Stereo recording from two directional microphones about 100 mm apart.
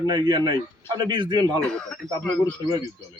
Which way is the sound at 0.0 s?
50° right (ahead or behind).